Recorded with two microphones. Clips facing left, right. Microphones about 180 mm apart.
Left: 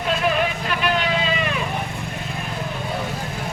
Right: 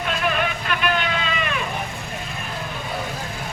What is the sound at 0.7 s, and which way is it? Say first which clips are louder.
Vehicle: left 1 dB; 35° left (ahead or behind).